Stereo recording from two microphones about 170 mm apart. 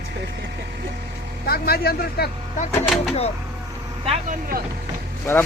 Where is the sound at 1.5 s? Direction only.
65° left (ahead or behind).